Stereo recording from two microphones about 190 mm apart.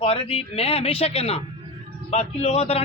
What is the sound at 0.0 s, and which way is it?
A man's voice, 30° left (ahead or behind).